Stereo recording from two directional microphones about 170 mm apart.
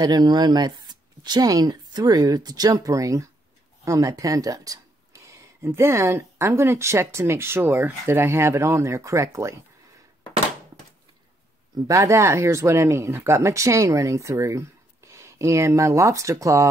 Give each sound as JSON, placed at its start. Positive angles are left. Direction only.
{"t": 0.0, "sound": "speech", "side_deg": -25}
{"t": 11.9, "sound": "speech", "side_deg": -15}